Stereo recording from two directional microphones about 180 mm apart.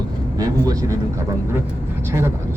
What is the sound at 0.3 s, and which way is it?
Speech, 20° right (ahead or behind).